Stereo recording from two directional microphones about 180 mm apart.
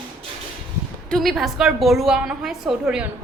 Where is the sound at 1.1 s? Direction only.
Centre (ahead or behind).